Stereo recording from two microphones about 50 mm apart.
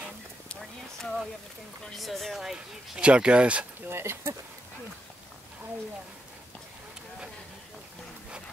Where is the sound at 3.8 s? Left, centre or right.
Right.